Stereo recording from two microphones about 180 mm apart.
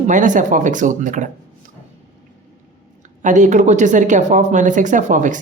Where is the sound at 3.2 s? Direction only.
45° right (ahead or behind).